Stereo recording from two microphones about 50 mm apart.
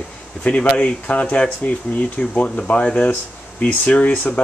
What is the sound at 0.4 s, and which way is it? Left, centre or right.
Speech, left.